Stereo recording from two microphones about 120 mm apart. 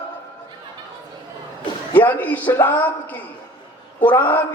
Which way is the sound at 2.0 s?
15° left (ahead or behind).